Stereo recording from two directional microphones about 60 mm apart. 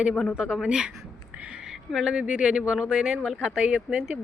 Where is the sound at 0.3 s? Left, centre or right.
Centre.